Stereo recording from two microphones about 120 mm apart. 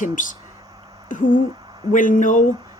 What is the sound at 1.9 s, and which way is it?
Speech, 90° left.